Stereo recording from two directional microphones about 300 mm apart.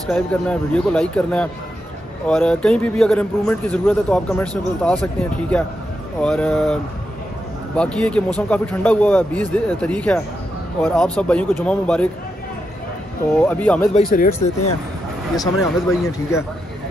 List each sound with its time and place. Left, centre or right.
0.1 s a man's voice: centre
13.4 s a man's voice: centre
14.1 s speech: left
15.3 s speech: centre